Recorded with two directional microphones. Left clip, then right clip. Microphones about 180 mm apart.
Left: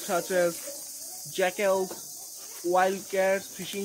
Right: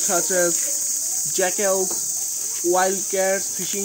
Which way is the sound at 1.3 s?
35° left (ahead or behind).